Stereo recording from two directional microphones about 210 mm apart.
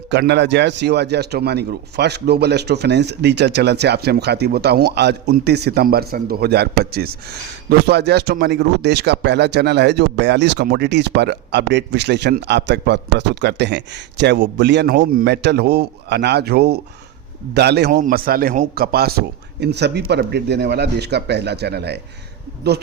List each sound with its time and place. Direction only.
0.1 s speech: 55° right (ahead or behind)